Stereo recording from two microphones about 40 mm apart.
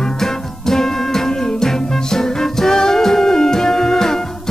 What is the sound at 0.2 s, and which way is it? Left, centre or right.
Music, centre.